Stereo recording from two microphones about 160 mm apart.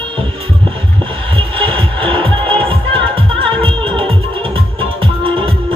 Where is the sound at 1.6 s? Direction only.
35° right (ahead or behind).